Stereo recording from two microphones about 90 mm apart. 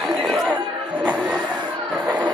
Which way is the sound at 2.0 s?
15° right (ahead or behind).